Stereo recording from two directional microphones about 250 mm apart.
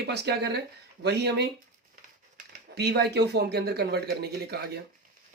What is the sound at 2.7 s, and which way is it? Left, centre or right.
Speech, right.